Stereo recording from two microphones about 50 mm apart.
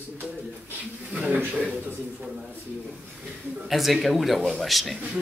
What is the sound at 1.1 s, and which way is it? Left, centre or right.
Speech, right.